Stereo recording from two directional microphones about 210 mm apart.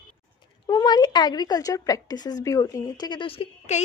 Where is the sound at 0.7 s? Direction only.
20° left (ahead or behind).